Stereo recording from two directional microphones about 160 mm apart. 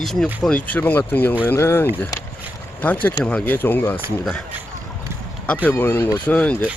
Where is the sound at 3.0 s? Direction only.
10° left (ahead or behind).